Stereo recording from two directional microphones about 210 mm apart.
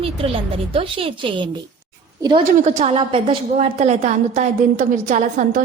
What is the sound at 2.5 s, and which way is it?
A woman's voice, 35° right (ahead or behind).